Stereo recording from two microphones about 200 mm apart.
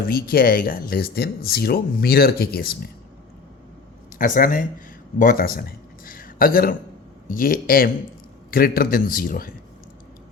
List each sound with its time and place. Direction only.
0.0 s speech: 50° left (ahead or behind)
4.4 s speech: 45° left (ahead or behind)
6.1 s a sound: 45° left (ahead or behind)
7.3 s speech: 45° left (ahead or behind)